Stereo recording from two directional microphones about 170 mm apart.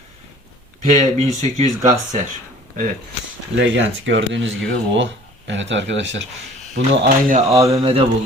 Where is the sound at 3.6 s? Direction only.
90° right.